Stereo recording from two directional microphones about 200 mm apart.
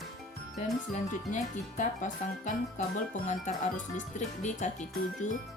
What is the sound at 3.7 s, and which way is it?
Speech, 40° left (ahead or behind).